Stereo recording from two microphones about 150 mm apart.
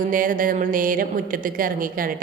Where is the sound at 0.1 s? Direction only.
65° right (ahead or behind).